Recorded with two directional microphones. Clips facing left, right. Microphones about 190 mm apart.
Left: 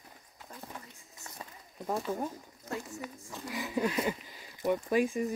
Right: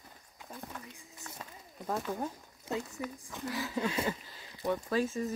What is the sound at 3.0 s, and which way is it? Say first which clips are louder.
Speech: right 3 dB; 15° left (ahead or behind).